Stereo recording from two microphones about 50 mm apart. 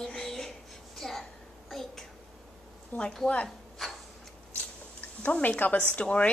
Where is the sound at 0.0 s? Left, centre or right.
Centre.